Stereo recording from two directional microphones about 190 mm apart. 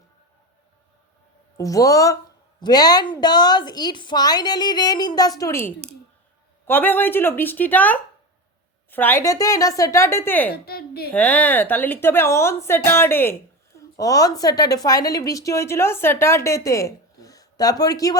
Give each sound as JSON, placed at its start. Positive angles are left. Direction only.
{"t": 1.5, "sound": "a woman's voice", "side_deg": 15}
{"t": 10.5, "sound": "a woman's voice", "side_deg": 55}
{"t": 11.1, "sound": "a woman's voice", "side_deg": 5}